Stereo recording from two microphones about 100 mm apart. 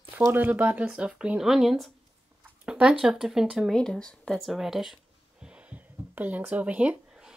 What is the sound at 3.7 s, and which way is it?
Speech, 5° left (ahead or behind).